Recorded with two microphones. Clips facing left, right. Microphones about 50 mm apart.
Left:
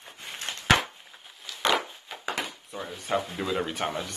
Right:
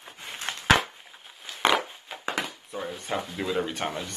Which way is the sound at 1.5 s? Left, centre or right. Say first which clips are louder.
Right 1 dB; right.